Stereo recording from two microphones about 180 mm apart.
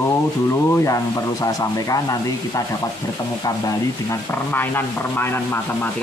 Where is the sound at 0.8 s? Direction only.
20° left (ahead or behind).